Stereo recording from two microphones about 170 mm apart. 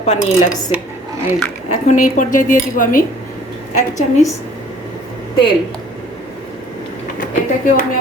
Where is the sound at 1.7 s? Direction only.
45° left (ahead or behind).